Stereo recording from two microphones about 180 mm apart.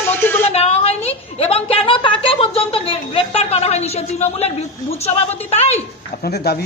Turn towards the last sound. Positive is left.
turn(degrees=60)  # may be behind; listen again after turning